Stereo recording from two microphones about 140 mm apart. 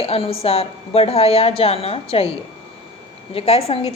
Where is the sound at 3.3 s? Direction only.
45° left (ahead or behind).